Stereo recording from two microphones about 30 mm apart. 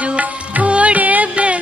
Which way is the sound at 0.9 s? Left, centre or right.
Right.